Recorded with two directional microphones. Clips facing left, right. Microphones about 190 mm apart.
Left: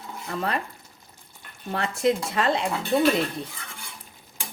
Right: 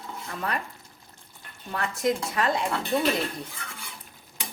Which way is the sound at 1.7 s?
25° left (ahead or behind).